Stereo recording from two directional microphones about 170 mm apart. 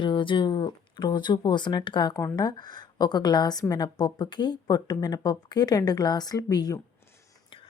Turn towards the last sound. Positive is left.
turn(degrees=25)  # may be behind; listen again after turning